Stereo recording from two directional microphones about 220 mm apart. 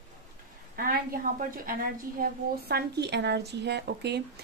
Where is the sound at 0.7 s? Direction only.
40° right (ahead or behind).